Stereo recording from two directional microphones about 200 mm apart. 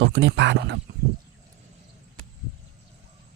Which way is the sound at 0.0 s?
65° right (ahead or behind).